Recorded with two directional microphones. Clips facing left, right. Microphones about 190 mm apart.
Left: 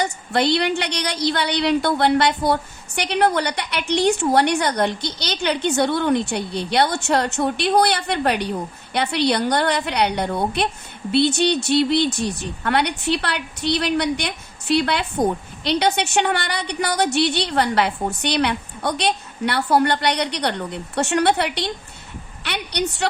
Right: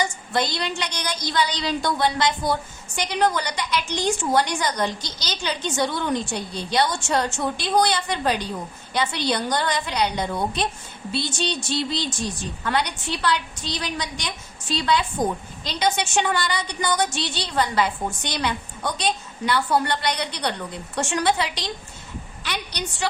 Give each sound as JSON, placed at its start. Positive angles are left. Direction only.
{"t": 0.0, "sound": "a woman's voice", "side_deg": 65}